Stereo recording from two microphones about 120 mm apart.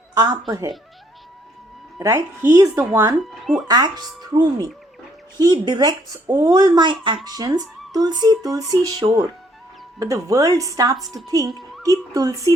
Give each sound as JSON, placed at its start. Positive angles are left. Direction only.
{"t": 0.2, "sound": "speech", "side_deg": -35}
{"t": 2.0, "sound": "speech", "side_deg": -25}
{"t": 3.2, "sound": "speech", "side_deg": 0}
{"t": 3.7, "sound": "speech", "side_deg": -35}